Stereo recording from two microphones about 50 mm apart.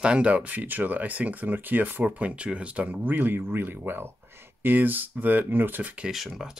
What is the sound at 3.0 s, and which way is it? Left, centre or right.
Speech, right.